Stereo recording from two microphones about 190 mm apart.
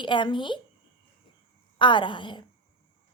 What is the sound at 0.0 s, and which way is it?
Speech, 25° left (ahead or behind).